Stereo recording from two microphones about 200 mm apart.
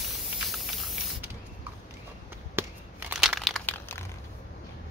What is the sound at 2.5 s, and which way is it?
Crushing, 10° right (ahead or behind).